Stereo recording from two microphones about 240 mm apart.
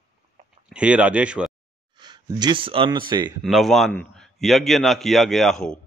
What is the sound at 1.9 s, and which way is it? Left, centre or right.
Speech, centre.